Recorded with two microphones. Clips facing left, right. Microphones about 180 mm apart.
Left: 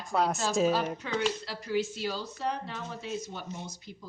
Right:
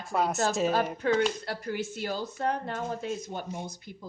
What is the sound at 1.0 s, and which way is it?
Speech, 50° right (ahead or behind).